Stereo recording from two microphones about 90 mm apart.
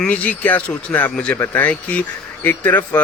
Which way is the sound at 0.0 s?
15° left (ahead or behind).